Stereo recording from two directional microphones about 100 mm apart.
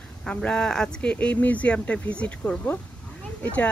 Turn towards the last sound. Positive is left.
turn(degrees=15)  # may be behind; listen again after turning